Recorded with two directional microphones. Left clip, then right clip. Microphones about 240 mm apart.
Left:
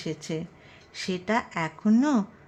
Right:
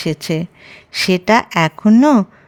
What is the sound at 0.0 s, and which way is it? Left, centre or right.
Speech, right.